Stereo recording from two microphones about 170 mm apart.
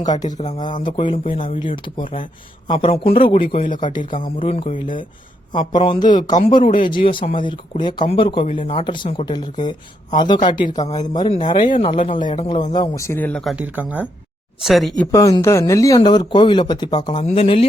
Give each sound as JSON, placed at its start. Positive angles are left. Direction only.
{"t": 0.3, "sound": "speech", "side_deg": 45}
{"t": 0.6, "sound": "speech", "side_deg": 30}
{"t": 15.1, "sound": "speech", "side_deg": 20}
{"t": 17.2, "sound": "speech", "side_deg": 40}